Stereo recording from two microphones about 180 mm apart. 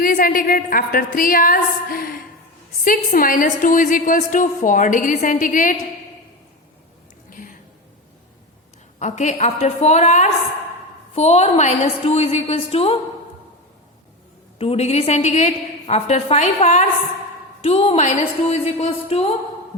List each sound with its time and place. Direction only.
0.0 s a woman's voice: 50° left (ahead or behind)
7.3 s a sound: 50° left (ahead or behind)
9.0 s a woman's voice: 40° left (ahead or behind)
14.6 s a woman's voice: 35° left (ahead or behind)